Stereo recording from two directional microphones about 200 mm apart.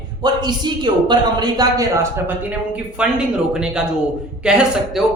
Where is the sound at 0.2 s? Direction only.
20° right (ahead or behind).